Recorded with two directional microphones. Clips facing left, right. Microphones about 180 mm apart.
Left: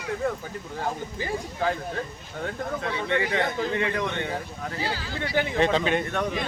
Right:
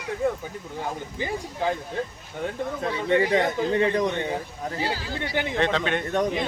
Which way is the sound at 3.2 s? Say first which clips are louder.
Right 4 dB; 35° right (ahead or behind).